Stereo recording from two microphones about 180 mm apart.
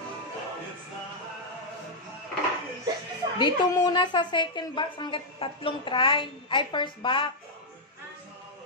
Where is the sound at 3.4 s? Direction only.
25° left (ahead or behind).